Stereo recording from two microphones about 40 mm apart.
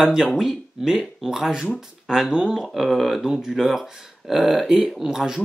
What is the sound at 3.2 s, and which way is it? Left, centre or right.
Speech, centre.